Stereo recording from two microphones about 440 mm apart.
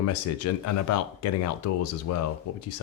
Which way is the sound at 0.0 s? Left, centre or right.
Left.